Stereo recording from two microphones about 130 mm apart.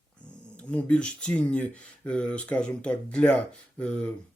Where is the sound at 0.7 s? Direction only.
10° left (ahead or behind).